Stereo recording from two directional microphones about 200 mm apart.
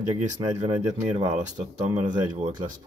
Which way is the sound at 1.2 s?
35° right (ahead or behind).